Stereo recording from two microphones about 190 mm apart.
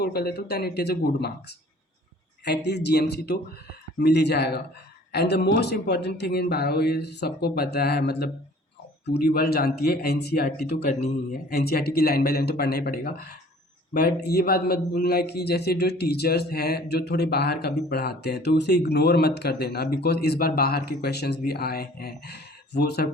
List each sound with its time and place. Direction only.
0.0 s a man's voice: 55° left (ahead or behind)